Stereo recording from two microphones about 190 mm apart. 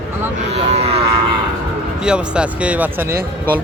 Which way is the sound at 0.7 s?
30° right (ahead or behind).